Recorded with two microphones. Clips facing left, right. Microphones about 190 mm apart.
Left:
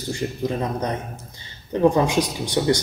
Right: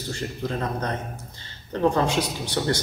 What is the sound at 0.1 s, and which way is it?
A man's voice, 15° left (ahead or behind).